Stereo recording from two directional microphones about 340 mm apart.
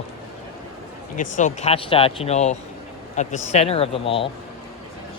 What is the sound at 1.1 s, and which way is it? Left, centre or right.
Speech, left.